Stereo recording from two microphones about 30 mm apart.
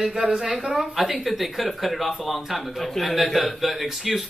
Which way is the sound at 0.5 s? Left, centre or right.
Centre.